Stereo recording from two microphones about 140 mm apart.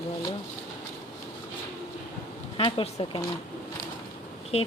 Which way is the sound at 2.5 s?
40° left (ahead or behind).